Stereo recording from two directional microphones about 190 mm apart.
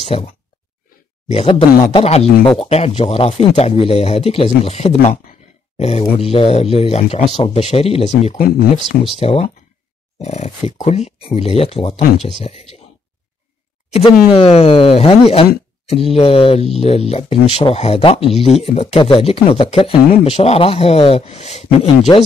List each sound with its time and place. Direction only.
0.0 s speech: 35° left (ahead or behind)
1.3 s speech: 30° left (ahead or behind)
9.2 s speech: 35° left (ahead or behind)
13.8 s speech: 35° left (ahead or behind)